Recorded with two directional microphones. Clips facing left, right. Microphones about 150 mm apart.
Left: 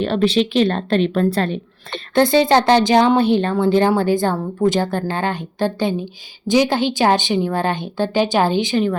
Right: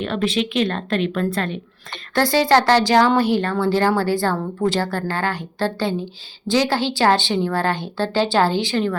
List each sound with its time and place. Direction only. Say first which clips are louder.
0.0 s a woman's voice: left 5 dB; 30° left (ahead or behind)
2.1 s speech: left 3 dB; 20° left (ahead or behind)